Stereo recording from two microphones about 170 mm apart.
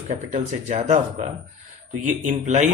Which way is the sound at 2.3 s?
45° right (ahead or behind).